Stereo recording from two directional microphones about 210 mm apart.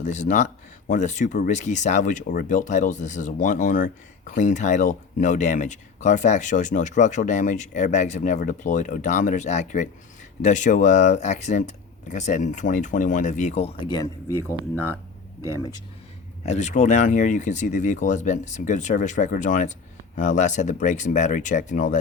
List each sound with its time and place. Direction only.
0.0 s speech: 35° left (ahead or behind); by 14.5 s 15° left (ahead or behind)
15.4 s speech: 15° right (ahead or behind)
16.5 s speech: 35° left (ahead or behind)